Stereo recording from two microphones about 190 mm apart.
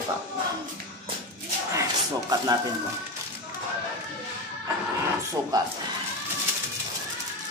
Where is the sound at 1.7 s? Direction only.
15° right (ahead or behind).